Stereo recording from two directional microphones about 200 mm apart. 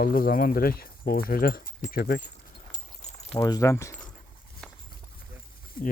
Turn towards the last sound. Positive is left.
turn(degrees=45)  # may be behind; listen again after turning